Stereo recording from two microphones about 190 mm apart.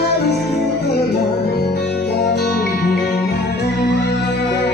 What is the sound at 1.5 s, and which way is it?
Music, 60° left (ahead or behind).